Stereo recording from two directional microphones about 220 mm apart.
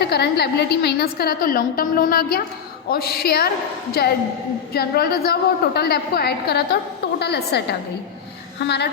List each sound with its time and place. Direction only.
0.0 s a woman's voice: 45° left (ahead or behind)